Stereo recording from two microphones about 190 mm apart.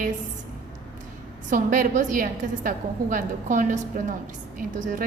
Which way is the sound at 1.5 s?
45° right (ahead or behind).